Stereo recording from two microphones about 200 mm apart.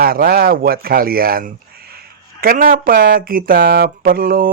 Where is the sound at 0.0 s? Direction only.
50° right (ahead or behind).